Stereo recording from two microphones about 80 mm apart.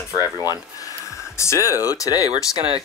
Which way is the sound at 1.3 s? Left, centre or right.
Left.